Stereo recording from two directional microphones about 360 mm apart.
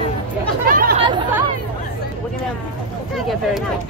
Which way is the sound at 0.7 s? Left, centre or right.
Right.